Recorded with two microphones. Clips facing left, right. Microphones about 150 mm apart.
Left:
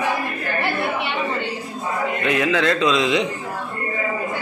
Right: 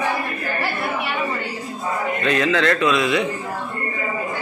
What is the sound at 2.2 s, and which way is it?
A man's voice, 15° left (ahead or behind).